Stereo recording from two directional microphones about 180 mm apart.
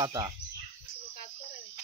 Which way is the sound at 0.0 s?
25° right (ahead or behind).